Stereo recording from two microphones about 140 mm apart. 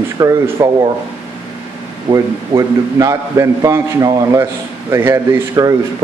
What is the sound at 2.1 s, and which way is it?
A man's voice, 25° right (ahead or behind).